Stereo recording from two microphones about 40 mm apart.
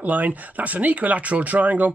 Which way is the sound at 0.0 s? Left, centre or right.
Right.